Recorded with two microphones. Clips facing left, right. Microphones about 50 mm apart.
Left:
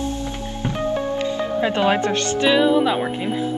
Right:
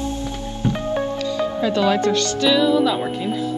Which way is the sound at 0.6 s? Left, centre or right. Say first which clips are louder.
Right 1 dB; left.